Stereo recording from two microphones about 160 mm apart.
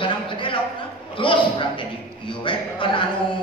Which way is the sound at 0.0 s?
30° left (ahead or behind).